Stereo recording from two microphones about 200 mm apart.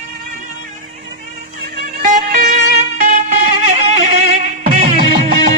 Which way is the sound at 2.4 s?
35° right (ahead or behind).